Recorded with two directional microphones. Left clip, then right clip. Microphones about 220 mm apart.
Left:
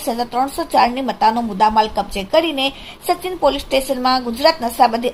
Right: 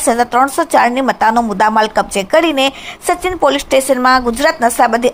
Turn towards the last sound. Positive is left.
turn(degrees=-20)  # may be behind; listen again after turning